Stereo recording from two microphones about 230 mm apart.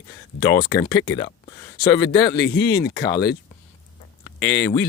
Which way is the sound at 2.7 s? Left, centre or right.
Centre.